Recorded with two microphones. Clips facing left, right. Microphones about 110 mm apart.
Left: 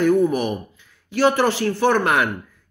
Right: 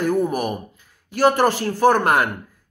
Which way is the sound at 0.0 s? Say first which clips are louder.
Left 3 dB; 40° right (ahead or behind).